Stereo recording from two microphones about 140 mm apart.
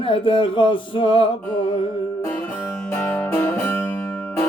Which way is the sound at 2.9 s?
15° left (ahead or behind).